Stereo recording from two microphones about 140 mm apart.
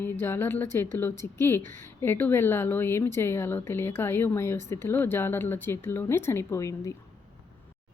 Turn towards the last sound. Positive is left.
turn(degrees=25)  # may be behind; listen again after turning